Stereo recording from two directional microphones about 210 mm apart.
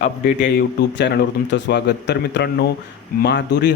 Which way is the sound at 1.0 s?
55° left (ahead or behind).